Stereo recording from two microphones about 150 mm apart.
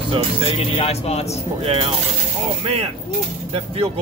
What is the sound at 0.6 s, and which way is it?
Speech, 45° left (ahead or behind).